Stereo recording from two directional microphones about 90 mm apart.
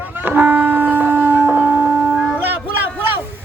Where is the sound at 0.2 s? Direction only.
20° right (ahead or behind).